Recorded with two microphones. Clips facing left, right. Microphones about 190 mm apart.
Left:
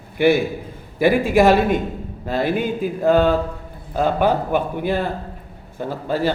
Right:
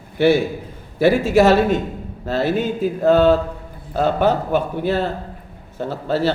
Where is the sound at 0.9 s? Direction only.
15° left (ahead or behind).